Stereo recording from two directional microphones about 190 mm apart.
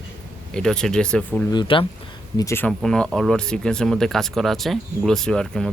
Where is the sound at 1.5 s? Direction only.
25° left (ahead or behind).